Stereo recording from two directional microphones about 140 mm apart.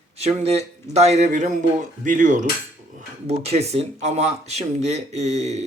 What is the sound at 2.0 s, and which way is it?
Cutlery, 70° right (ahead or behind).